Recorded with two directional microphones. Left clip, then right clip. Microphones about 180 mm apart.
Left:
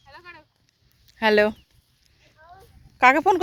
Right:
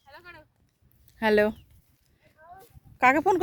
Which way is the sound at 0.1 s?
15° right (ahead or behind).